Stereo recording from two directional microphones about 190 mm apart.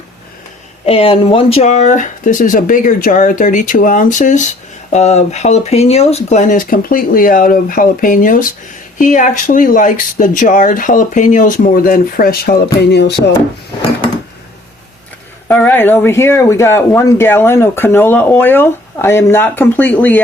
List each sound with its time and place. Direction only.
0.9 s speech: 30° left (ahead or behind); by 13.3 s 65° left (ahead or behind)
15.4 s speech: 10° left (ahead or behind)